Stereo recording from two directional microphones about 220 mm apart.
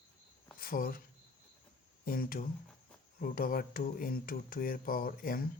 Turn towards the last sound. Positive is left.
turn(degrees=40)  # may be behind; listen again after turning